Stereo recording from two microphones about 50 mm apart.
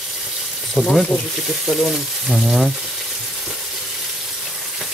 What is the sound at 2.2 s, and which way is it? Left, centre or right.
Frying, centre.